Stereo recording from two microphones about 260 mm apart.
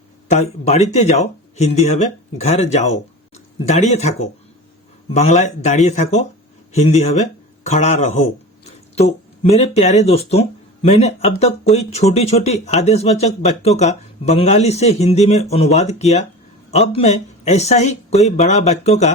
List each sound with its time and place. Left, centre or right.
0.3 s speech: left
9.4 s speech: left